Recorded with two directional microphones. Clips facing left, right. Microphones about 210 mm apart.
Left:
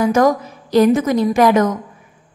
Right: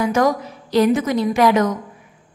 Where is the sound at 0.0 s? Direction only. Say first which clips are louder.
Left 3 dB; 45° left (ahead or behind).